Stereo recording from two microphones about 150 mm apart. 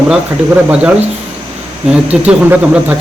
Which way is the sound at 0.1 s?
10° right (ahead or behind).